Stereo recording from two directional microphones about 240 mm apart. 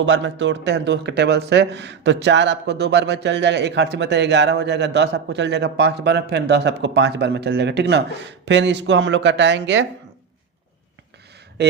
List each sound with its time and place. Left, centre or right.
0.0 s a man's voice: right
11.6 s a man's voice: right